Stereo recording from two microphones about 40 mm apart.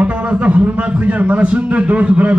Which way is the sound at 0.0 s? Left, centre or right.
Right.